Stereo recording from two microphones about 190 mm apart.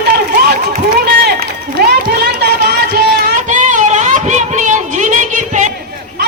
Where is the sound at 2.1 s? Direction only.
55° right (ahead or behind).